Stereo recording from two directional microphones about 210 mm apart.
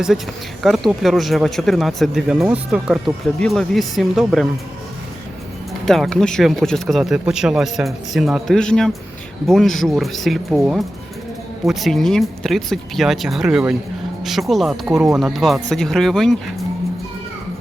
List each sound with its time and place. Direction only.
0.6 s speech: centre (ahead or behind)
5.8 s speech: centre (ahead or behind)